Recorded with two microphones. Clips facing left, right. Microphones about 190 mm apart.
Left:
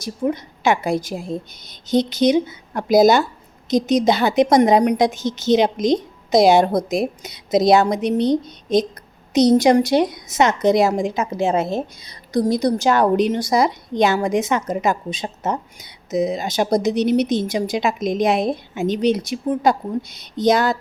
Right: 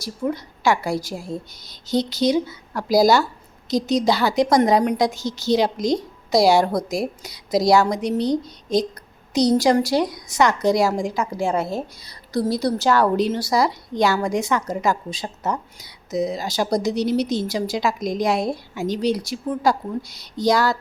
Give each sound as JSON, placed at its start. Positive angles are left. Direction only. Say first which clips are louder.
{"t": 0.0, "sound": "a woman's voice", "louder": "left 3 dB", "side_deg": 20}